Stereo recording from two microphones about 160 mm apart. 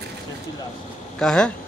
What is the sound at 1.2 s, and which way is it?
Speech, 5° left (ahead or behind).